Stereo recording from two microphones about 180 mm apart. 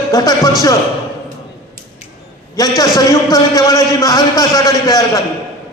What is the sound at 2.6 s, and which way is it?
A man's voice, 20° left (ahead or behind).